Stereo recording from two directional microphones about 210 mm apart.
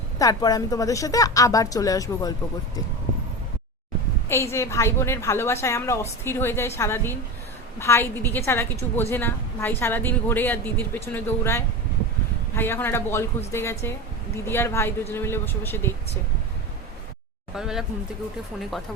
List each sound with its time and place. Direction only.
0.2 s a woman's voice: 15° left (ahead or behind)
4.3 s a woman's voice: 15° left (ahead or behind)
17.6 s speech: centre (ahead or behind)